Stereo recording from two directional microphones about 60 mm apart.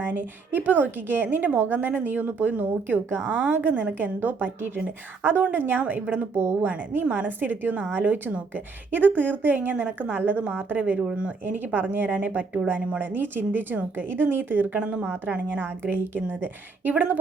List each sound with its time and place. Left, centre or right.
0.0 s a woman's voice: right
6.3 s a woman's voice: right
6.7 s a woman's voice: right
11.4 s a woman's voice: right